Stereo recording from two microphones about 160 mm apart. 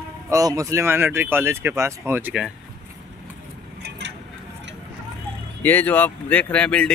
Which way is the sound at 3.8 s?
90° right.